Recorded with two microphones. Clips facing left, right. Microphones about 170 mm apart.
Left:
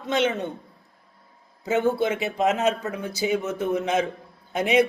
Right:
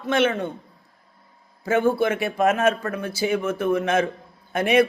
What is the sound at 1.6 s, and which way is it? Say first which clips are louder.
Speech: right 2 dB; 20° left (ahead or behind).